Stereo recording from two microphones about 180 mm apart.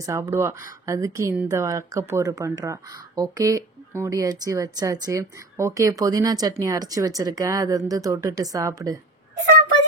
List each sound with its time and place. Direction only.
0.0 s speech: 15° right (ahead or behind)